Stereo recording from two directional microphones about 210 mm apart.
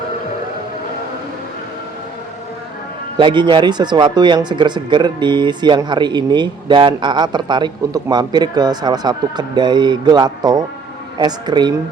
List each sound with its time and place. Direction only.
3.2 s speech: 20° right (ahead or behind)